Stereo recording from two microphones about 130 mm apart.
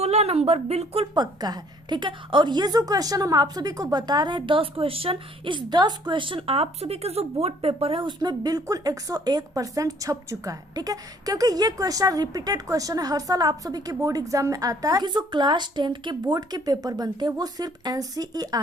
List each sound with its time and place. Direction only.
0.0 s a woman's voice: 55° right (ahead or behind)
1.1 s a woman's voice: 30° right (ahead or behind)